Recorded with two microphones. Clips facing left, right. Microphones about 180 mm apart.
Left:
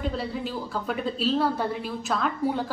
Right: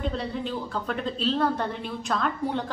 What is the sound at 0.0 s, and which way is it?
A woman's voice, 5° left (ahead or behind).